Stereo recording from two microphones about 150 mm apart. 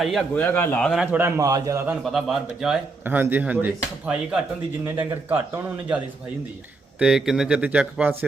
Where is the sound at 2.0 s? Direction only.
Centre (ahead or behind).